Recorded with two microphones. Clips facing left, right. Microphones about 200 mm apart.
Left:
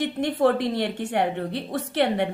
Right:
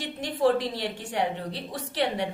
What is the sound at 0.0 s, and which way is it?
A woman's voice, 55° left (ahead or behind).